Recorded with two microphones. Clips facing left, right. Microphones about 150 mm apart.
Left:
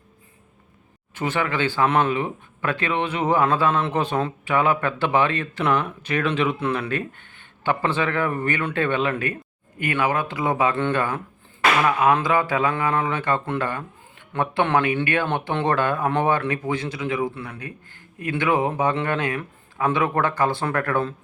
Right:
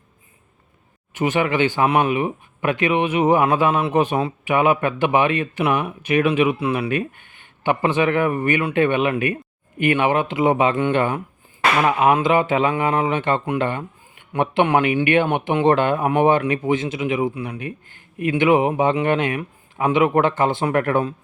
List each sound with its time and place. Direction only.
1.1 s speech: 15° right (ahead or behind)